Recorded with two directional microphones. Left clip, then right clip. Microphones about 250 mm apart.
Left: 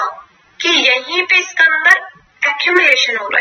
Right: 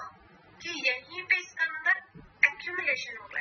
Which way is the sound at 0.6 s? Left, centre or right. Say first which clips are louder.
Left 19 dB; left.